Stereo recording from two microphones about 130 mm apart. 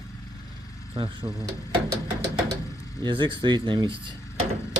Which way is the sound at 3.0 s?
40° right (ahead or behind).